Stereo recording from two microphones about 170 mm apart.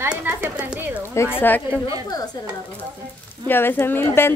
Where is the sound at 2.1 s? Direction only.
20° left (ahead or behind).